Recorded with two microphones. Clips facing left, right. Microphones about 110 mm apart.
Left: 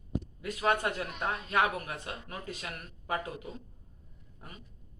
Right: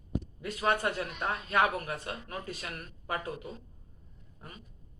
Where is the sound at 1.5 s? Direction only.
15° left (ahead or behind).